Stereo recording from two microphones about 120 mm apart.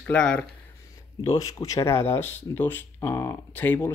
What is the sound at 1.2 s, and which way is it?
Speech, 30° left (ahead or behind).